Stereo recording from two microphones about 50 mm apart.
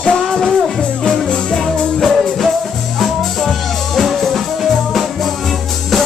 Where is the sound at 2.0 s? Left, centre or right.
Centre.